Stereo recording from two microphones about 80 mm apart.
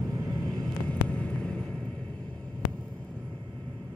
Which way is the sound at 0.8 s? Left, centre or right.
Centre.